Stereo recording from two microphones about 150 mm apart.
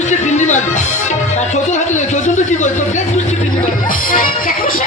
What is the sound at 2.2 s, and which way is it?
Speech, 55° left (ahead or behind).